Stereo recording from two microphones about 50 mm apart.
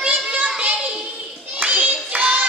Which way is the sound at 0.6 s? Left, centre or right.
Centre.